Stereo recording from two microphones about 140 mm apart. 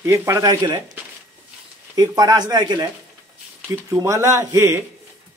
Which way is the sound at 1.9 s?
30° right (ahead or behind).